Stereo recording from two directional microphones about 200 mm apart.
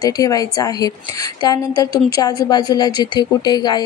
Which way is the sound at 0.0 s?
20° left (ahead or behind).